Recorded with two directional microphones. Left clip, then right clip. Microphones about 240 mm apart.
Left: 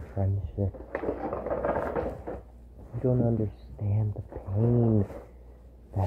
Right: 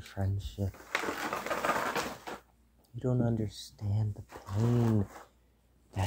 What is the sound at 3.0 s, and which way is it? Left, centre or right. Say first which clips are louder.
Speech: left 6 dB; right.